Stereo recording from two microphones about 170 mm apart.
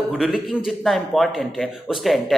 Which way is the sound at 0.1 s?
Centre (ahead or behind).